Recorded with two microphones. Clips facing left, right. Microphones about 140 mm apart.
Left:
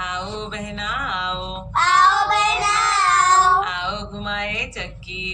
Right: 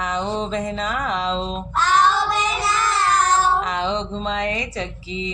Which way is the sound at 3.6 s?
40° right (ahead or behind).